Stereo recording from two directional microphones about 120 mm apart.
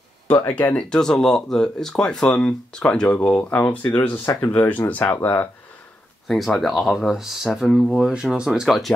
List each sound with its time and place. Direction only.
0.3 s speech: 15° left (ahead or behind)
6.2 s speech: centre (ahead or behind)